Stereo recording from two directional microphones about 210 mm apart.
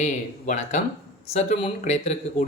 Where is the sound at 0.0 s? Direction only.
35° left (ahead or behind).